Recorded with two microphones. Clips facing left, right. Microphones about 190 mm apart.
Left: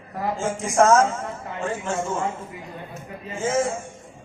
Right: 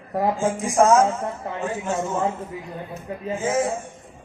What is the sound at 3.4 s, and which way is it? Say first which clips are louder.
Speech: left 1 dB; 15° right (ahead or behind).